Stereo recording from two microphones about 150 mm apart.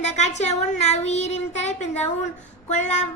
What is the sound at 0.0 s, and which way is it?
A woman's voice, 50° left (ahead or behind).